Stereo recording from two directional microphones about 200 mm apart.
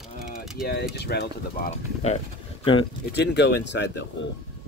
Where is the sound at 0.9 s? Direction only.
55° left (ahead or behind).